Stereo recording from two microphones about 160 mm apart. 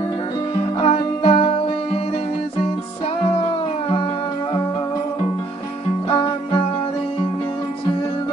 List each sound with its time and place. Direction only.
0.7 s music: 35° left (ahead or behind)
6.0 s music: 25° left (ahead or behind)